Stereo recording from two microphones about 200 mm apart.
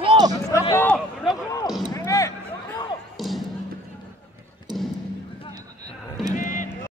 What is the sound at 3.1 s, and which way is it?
Music, centre (ahead or behind).